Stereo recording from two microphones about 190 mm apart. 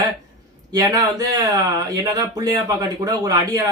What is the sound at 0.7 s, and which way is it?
Speech, 15° right (ahead or behind).